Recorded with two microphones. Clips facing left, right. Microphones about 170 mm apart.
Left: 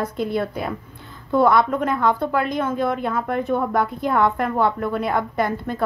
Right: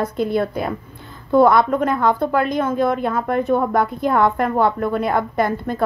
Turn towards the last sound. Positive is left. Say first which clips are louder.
# right 3 dB
turn(degrees=-40)  # may be behind; listen again after turning